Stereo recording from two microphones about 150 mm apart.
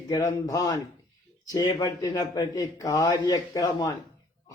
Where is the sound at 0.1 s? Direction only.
25° left (ahead or behind).